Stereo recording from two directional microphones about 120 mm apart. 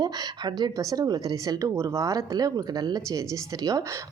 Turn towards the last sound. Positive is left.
turn(degrees=-25)  # may be behind; listen again after turning